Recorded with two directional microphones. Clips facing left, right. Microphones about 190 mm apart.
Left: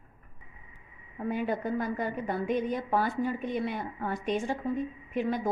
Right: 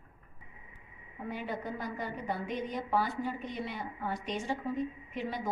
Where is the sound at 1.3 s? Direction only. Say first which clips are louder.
Left 7 dB; 50° left (ahead or behind).